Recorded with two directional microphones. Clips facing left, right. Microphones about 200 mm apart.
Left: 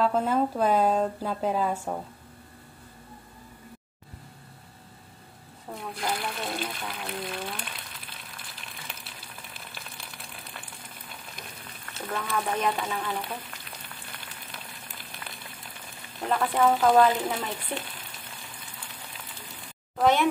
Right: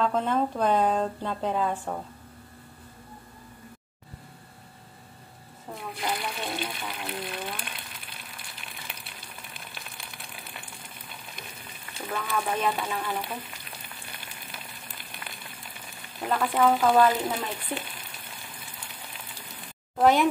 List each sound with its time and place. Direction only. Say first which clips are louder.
0.0 s a woman's voice: left 1 dB; 5° left (ahead or behind)
5.8 s water: even; centre (ahead or behind)
12.2 s speech: even; 5° left (ahead or behind)
14.5 s a sound: even; centre (ahead or behind)
16.3 s speech: even; 5° left (ahead or behind)
20.0 s speech: right 2 dB; 10° right (ahead or behind)